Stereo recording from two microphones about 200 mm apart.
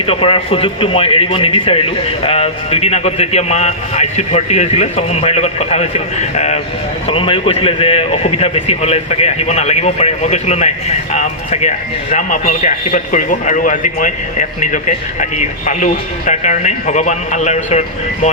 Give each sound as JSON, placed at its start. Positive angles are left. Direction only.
{"t": 0.0, "sound": "a man's voice", "side_deg": 25}